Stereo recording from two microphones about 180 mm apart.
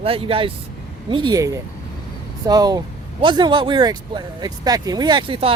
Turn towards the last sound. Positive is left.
turn(degrees=-30)  # may be behind; listen again after turning